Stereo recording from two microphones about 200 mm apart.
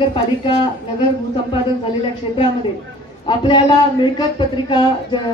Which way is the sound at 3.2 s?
20° left (ahead or behind).